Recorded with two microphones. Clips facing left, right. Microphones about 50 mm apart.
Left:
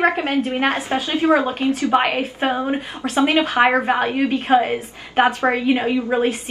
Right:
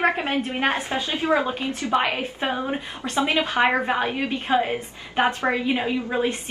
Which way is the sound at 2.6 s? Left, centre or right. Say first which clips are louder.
Left 5 dB; centre.